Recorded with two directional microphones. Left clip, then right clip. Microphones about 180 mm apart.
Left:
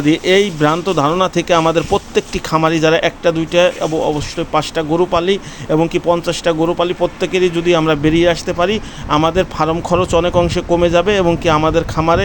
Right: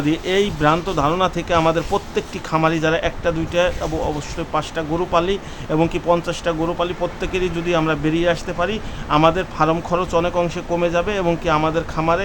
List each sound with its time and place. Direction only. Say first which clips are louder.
0.0 s speech: left 6 dB; 30° left (ahead or behind)